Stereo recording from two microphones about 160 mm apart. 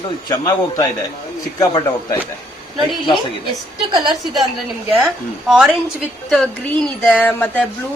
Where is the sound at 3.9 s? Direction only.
30° right (ahead or behind).